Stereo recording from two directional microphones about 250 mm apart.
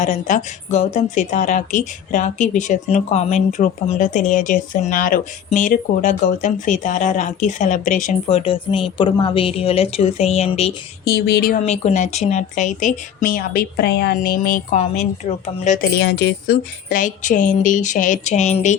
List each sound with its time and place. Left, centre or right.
0.0 s a woman's voice: left
11.0 s a woman's voice: left
16.0 s speech: left